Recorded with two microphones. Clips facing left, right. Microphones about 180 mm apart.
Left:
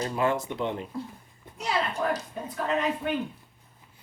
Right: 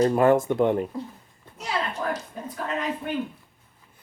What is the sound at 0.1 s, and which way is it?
Speech, 50° right (ahead or behind).